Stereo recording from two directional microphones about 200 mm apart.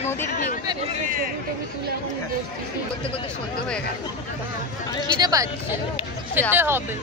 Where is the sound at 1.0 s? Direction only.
45° right (ahead or behind).